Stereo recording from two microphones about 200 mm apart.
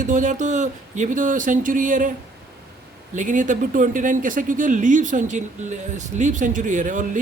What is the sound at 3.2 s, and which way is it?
A man's voice, 40° right (ahead or behind).